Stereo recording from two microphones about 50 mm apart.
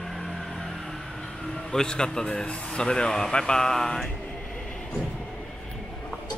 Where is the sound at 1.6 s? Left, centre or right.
Centre.